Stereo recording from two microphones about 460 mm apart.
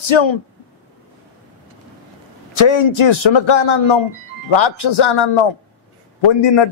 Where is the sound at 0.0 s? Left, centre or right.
Left.